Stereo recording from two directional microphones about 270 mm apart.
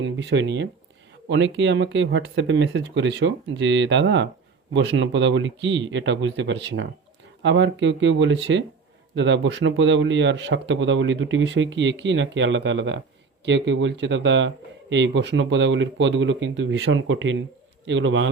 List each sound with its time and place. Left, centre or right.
0.0 s a man's voice: right